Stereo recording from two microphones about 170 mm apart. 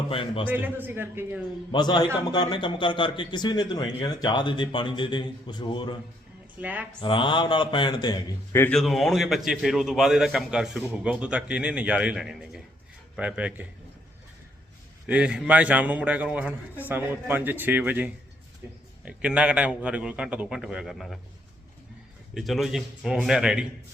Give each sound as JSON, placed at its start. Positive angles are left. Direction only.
{"t": 0.1, "sound": "a man's voice", "side_deg": 30}
{"t": 0.4, "sound": "a man's voice", "side_deg": -10}
{"t": 1.7, "sound": "a man's voice", "side_deg": 25}
{"t": 6.6, "sound": "a man's voice", "side_deg": -10}
{"t": 7.0, "sound": "a man's voice", "side_deg": 30}
{"t": 8.5, "sound": "speech", "side_deg": 10}
{"t": 8.8, "sound": "a man's voice", "side_deg": 0}
{"t": 15.0, "sound": "a man's voice", "side_deg": -5}
{"t": 22.4, "sound": "a man's voice", "side_deg": 0}